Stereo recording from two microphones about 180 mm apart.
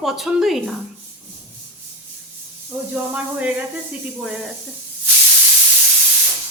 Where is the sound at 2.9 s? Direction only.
10° right (ahead or behind).